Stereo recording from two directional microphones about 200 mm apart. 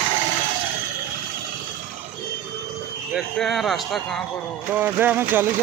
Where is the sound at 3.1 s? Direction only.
Centre (ahead or behind).